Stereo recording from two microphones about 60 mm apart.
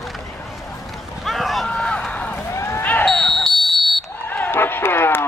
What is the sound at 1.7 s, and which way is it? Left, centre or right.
Run, centre.